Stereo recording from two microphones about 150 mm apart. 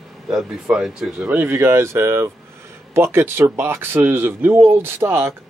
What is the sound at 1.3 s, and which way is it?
Speech, 15° right (ahead or behind).